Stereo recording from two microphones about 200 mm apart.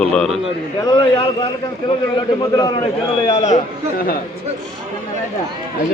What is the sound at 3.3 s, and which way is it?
Speech, 35° left (ahead or behind).